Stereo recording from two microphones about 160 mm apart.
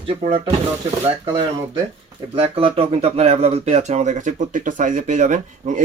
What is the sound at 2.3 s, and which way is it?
Speech, 35° right (ahead or behind).